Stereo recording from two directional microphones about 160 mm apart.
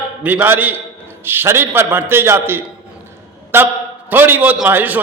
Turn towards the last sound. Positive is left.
turn(degrees=-10)  # may be behind; listen again after turning